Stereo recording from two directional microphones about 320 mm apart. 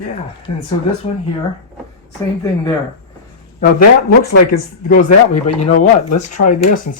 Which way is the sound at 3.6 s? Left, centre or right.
Left.